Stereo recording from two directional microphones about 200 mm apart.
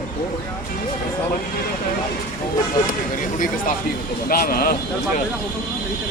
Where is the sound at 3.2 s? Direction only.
40° left (ahead or behind).